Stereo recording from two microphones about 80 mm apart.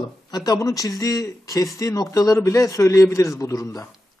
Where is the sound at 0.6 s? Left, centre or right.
Left.